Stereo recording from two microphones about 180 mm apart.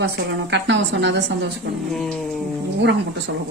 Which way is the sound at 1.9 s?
5° left (ahead or behind).